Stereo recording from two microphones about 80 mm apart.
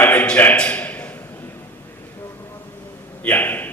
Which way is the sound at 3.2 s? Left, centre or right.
Left.